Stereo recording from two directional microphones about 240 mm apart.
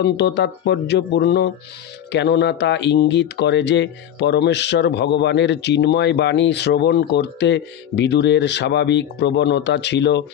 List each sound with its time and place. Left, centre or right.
0.0 s speech: left